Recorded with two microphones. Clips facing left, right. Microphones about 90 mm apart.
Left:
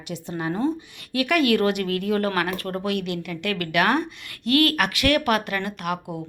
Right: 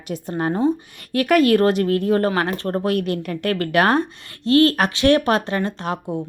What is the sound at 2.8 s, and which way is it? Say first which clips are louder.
A woman's voice: right 5 dB; 40° right (ahead or behind).